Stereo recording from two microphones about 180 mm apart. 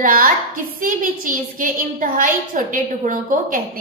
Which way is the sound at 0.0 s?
50° right (ahead or behind).